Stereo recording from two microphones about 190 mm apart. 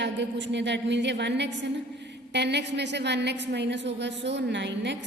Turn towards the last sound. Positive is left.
turn(degrees=-65)  # may be behind; listen again after turning